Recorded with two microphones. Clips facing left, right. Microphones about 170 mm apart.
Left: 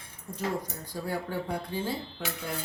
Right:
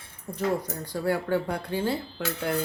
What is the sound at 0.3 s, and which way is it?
Speech, 65° right (ahead or behind).